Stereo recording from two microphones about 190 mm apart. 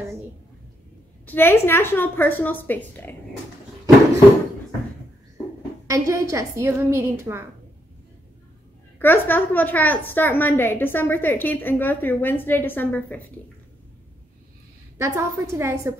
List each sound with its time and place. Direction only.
1.2 s a woman's voice: 10° left (ahead or behind)
5.9 s a woman's voice: 15° right (ahead or behind)
9.0 s a woman's voice: 10° left (ahead or behind)
15.0 s a woman's voice: 15° right (ahead or behind)